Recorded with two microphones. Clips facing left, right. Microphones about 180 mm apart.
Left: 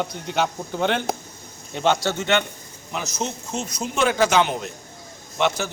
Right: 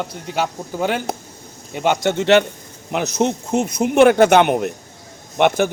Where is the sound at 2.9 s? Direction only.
65° right (ahead or behind).